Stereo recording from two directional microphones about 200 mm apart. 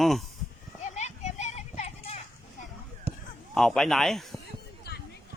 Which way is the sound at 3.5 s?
Centre (ahead or behind).